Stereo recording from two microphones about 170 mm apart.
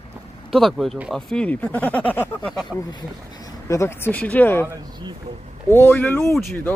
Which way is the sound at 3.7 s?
15° left (ahead or behind).